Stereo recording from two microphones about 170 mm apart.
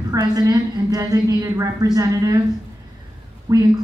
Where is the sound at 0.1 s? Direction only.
20° right (ahead or behind).